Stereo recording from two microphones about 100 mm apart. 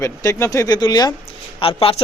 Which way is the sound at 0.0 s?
30° left (ahead or behind).